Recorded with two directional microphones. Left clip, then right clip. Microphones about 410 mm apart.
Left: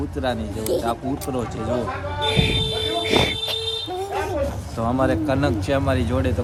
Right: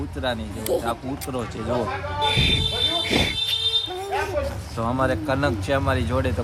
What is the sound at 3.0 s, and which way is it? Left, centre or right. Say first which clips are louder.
Fire alarm: left 3 dB; centre.